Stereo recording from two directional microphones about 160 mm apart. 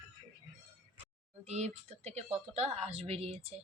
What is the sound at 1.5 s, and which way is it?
A woman's voice, 40° right (ahead or behind).